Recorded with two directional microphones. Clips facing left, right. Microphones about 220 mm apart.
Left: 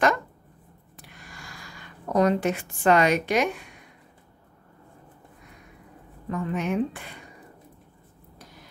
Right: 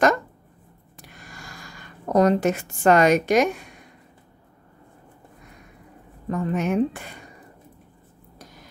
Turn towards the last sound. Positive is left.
turn(degrees=-45)  # may be behind; listen again after turning